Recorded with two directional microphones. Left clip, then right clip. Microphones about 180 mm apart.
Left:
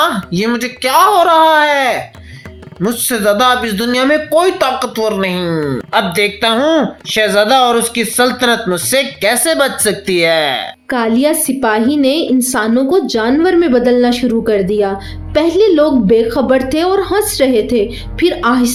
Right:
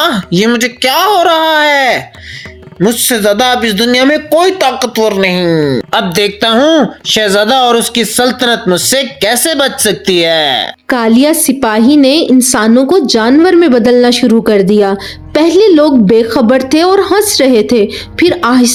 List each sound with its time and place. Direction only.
0.0 s speech: 50° right (ahead or behind)
6.0 s speech: 55° right (ahead or behind)